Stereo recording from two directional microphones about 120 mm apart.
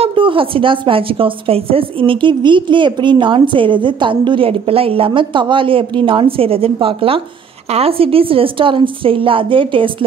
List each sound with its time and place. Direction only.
0.0 s a woman's voice: 45° right (ahead or behind)